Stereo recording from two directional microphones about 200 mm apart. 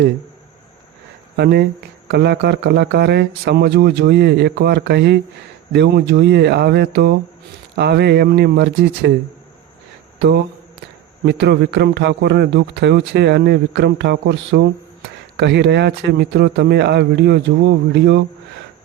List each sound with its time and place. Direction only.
1.4 s a man's voice: 55° right (ahead or behind)
10.2 s a man's voice: 60° right (ahead or behind)